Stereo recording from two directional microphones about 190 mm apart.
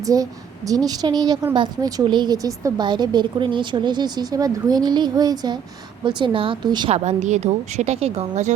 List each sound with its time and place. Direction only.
0.0 s a woman's voice: 20° right (ahead or behind)
6.9 s a woman's voice: 35° right (ahead or behind)